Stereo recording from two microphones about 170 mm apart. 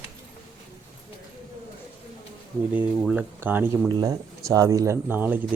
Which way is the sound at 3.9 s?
20° right (ahead or behind).